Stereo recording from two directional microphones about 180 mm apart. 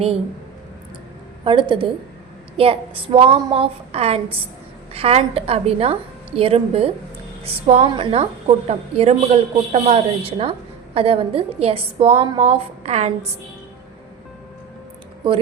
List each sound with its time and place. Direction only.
1.5 s a woman's voice: 30° right (ahead or behind)
7.9 s a woman's voice: 25° right (ahead or behind)